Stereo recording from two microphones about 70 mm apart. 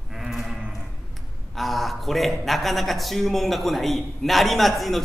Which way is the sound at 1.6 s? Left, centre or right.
Centre.